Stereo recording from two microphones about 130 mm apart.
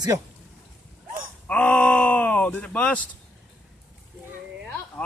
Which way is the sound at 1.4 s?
10° left (ahead or behind).